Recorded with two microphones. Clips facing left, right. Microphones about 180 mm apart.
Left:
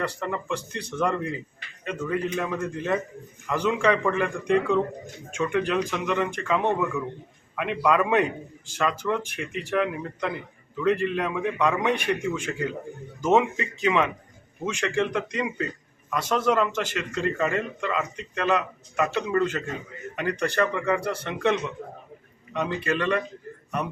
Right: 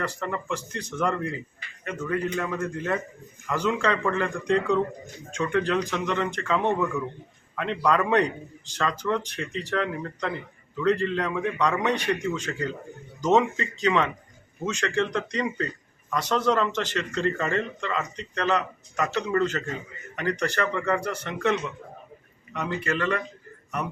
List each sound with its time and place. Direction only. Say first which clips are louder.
0.2 s a man's voice: left 1 dB; 15° left (ahead or behind)
22.5 s a man's voice: left 2 dB; 15° left (ahead or behind)